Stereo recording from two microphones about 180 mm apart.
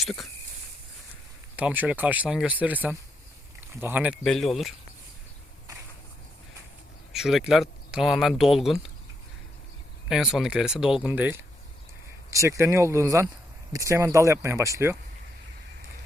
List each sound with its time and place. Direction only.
0.0 s speech: centre (ahead or behind)
1.5 s speech: 10° right (ahead or behind)
4.2 s speech: centre (ahead or behind)
7.1 s speech: centre (ahead or behind)
10.1 s speech: 5° right (ahead or behind)